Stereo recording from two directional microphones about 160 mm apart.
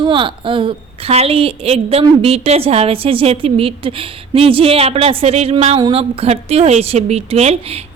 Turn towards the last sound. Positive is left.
turn(degrees=-40)  # may be behind; listen again after turning